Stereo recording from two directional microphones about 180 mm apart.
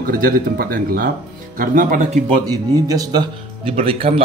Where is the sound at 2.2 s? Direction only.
20° right (ahead or behind).